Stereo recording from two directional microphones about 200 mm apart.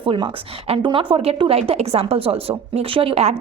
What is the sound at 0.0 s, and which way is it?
A woman's voice, 25° right (ahead or behind).